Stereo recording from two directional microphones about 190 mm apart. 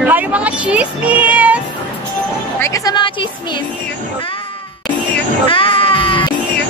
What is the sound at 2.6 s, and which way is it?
Music, 20° left (ahead or behind).